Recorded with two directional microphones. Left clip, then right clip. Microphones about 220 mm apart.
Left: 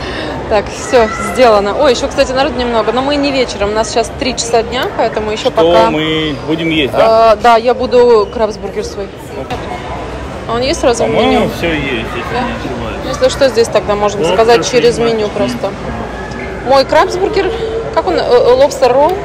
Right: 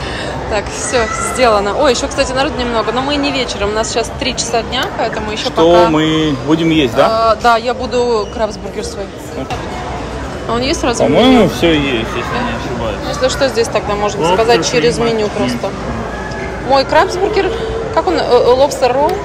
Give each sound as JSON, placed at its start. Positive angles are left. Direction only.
{"t": 0.5, "sound": "speech", "side_deg": 0}
{"t": 6.2, "sound": "speech", "side_deg": -35}
{"t": 7.1, "sound": "speech", "side_deg": 0}
{"t": 10.5, "sound": "speech", "side_deg": -15}
{"t": 11.1, "sound": "speech", "side_deg": -45}
{"t": 13.2, "sound": "speech", "side_deg": -15}